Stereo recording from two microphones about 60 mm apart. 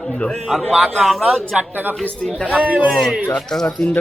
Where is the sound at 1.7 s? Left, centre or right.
Right.